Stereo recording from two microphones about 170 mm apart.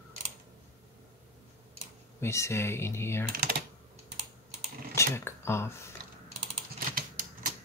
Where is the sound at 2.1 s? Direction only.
15° left (ahead or behind).